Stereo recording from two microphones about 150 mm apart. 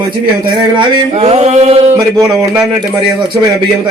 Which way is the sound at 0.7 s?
40° right (ahead or behind).